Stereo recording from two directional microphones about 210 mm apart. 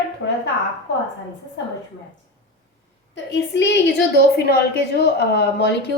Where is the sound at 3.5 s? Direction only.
55° left (ahead or behind).